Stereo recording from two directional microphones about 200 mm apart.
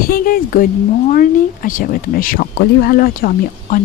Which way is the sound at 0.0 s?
45° left (ahead or behind).